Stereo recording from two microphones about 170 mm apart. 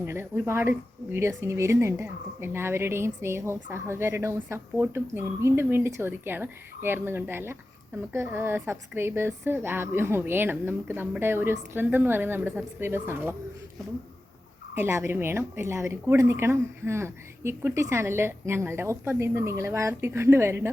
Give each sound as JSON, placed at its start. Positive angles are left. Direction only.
{"t": 0.0, "sound": "a woman's voice", "side_deg": -15}
{"t": 14.8, "sound": "a woman's voice", "side_deg": -15}